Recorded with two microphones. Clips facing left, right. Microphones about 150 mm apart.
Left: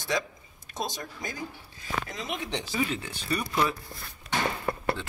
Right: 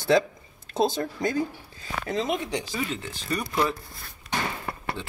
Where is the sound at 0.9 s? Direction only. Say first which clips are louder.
Right 11 dB; 60° right (ahead or behind).